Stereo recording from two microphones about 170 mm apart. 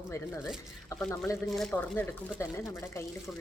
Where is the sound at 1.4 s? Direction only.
Centre (ahead or behind).